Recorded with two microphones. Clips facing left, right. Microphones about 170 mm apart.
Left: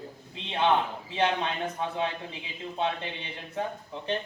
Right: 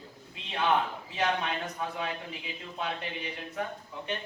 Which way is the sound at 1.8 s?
25° left (ahead or behind).